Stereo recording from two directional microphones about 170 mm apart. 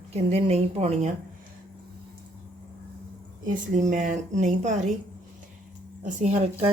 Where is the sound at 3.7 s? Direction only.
45° right (ahead or behind).